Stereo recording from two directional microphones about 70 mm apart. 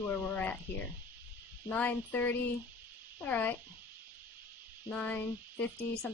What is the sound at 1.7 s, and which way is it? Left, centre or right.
Speech, left.